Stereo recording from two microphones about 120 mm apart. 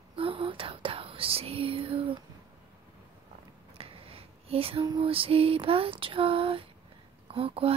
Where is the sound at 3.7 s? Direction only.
50° right (ahead or behind).